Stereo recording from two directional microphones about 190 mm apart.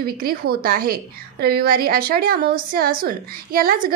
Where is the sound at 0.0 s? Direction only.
50° right (ahead or behind).